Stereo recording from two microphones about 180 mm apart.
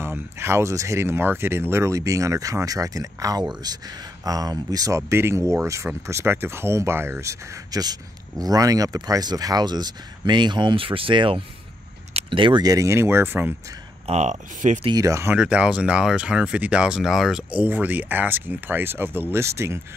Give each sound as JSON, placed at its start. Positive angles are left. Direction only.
{"t": 0.0, "sound": "speech", "side_deg": -15}
{"t": 14.0, "sound": "speech", "side_deg": -40}
{"t": 14.9, "sound": "speech", "side_deg": -20}